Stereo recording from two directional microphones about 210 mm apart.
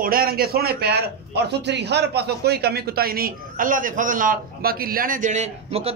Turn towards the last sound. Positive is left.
turn(degrees=-30)  # may be behind; listen again after turning